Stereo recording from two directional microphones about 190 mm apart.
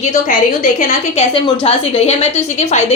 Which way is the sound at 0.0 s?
40° left (ahead or behind).